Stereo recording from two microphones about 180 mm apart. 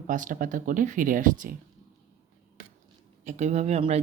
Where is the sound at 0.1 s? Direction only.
45° right (ahead or behind).